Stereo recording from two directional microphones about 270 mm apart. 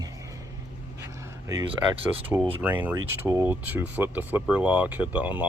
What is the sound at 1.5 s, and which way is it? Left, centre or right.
Speech, centre.